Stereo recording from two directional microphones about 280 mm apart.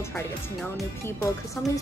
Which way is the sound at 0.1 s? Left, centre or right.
Centre.